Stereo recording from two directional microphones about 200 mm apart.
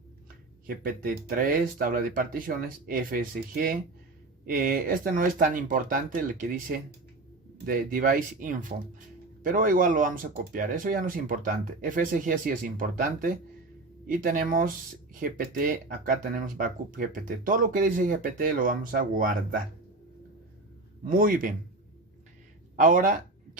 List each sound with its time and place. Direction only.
0.7 s speech: 45° right (ahead or behind)
21.1 s speech: 45° right (ahead or behind)
22.7 s speech: 40° right (ahead or behind)